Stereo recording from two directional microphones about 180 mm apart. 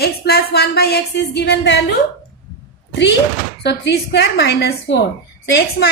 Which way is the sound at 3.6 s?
70° left (ahead or behind).